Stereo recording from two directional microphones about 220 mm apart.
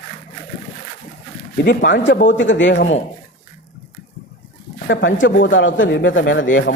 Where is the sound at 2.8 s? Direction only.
30° left (ahead or behind).